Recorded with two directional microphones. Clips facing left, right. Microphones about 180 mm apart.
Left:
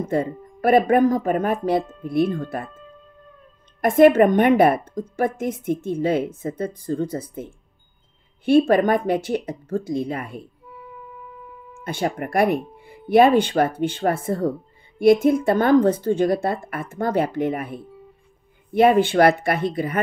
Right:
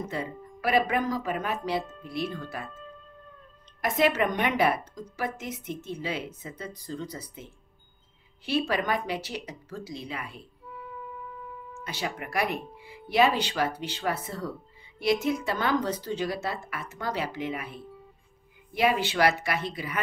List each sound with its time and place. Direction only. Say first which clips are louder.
0.1 s a woman's voice: left 11 dB; 50° left (ahead or behind)
3.8 s a woman's voice: left 11 dB; 50° left (ahead or behind)
11.8 s a woman's voice: left 10 dB; 50° left (ahead or behind)